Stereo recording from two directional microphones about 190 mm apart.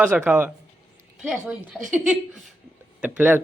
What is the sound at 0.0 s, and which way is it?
A man's voice, 10° right (ahead or behind).